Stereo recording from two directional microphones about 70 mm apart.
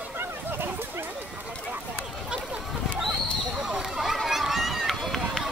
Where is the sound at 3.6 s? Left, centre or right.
Centre.